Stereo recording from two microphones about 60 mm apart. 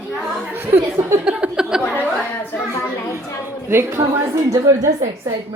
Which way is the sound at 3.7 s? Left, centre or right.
Right.